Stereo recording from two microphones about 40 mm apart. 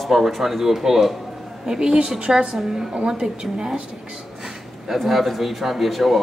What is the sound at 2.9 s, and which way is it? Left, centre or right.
Speech, right.